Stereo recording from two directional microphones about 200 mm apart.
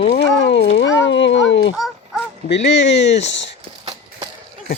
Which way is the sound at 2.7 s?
60° left (ahead or behind).